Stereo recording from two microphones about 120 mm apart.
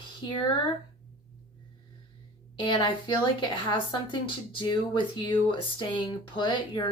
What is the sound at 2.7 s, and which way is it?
Speech, 40° left (ahead or behind).